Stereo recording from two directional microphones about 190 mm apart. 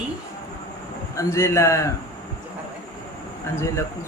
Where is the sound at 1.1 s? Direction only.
15° left (ahead or behind).